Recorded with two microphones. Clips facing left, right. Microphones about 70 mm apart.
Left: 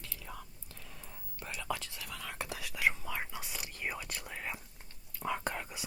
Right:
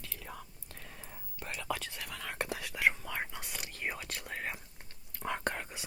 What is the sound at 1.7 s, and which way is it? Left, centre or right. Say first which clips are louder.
Whispering: right 1 dB; right.